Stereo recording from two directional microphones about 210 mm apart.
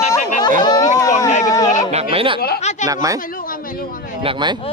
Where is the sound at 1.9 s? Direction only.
30° right (ahead or behind).